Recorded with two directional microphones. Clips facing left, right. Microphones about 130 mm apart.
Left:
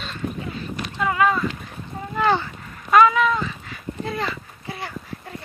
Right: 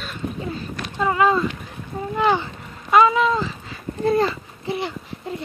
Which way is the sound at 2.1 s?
15° right (ahead or behind).